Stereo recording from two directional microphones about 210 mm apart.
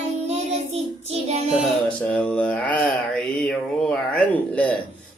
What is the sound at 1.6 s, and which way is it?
Mantra, 5° left (ahead or behind).